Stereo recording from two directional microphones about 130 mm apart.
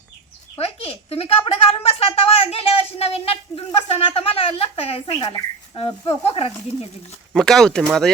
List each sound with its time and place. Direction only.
0.6 s a sound: 50° left (ahead or behind)
1.5 s speech: 50° left (ahead or behind)
7.3 s speech: 5° left (ahead or behind)